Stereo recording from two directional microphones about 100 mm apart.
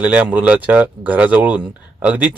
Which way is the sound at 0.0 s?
15° right (ahead or behind).